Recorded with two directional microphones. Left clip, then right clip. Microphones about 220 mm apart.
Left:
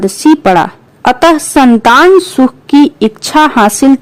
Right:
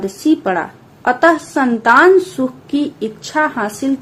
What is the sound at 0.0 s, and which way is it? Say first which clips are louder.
A woman's voice: left 8 dB; 50° left (ahead or behind).